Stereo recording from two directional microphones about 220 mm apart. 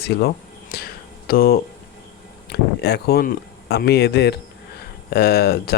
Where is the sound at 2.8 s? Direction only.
50° left (ahead or behind).